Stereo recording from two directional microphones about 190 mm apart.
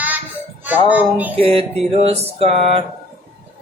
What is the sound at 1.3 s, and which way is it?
Speech, 30° right (ahead or behind).